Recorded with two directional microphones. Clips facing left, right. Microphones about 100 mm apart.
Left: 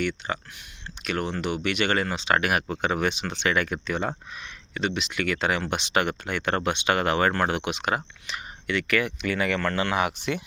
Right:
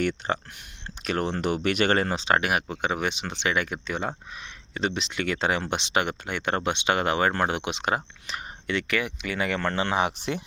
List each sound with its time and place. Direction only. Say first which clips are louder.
0.0 s speech: right 2 dB; 45° right (ahead or behind)
2.4 s speech: left 1 dB; 20° right (ahead or behind)
4.7 s speech: even; 30° right (ahead or behind)